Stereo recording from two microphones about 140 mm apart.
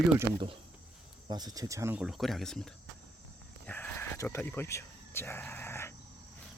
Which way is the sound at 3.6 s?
15° left (ahead or behind).